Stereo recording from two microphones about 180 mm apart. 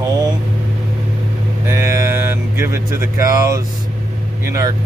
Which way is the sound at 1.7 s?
15° right (ahead or behind).